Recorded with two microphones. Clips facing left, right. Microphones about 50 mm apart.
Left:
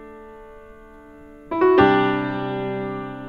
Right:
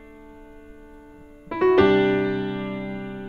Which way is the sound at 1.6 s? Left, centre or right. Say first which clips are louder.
Left 2 dB; centre.